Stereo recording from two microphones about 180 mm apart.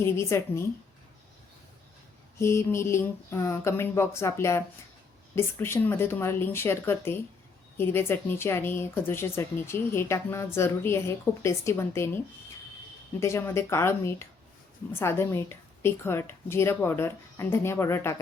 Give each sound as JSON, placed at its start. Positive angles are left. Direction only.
{"t": 0.0, "sound": "speech", "side_deg": 15}
{"t": 2.4, "sound": "speech", "side_deg": 15}